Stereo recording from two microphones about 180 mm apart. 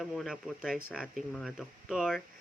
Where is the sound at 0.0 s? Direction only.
Centre (ahead or behind).